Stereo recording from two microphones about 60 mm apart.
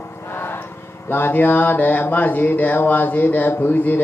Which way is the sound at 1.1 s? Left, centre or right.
Left.